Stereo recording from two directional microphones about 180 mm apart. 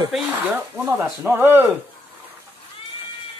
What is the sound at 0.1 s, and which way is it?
Speech, 10° right (ahead or behind).